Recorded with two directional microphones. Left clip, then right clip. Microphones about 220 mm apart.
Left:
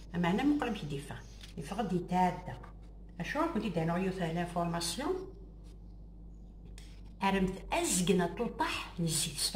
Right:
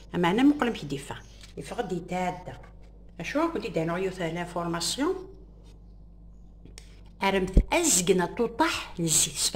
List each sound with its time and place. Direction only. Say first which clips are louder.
0.1 s a woman's voice: right 8 dB; 50° right (ahead or behind)
3.2 s a woman's voice: right 6 dB; 55° right (ahead or behind)
6.7 s a woman's voice: right 6 dB; 45° right (ahead or behind)